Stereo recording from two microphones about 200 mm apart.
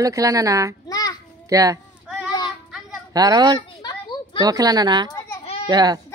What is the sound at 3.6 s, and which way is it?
Children playing, 20° left (ahead or behind).